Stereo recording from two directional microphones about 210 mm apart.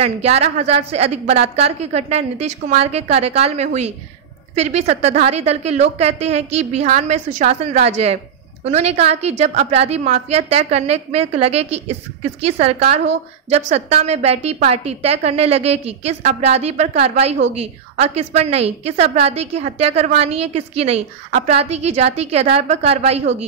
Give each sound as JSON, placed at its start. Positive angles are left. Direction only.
{"t": 0.0, "sound": "a woman's voice", "side_deg": -30}